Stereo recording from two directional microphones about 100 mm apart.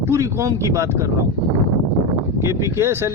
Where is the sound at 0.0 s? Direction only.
30° right (ahead or behind).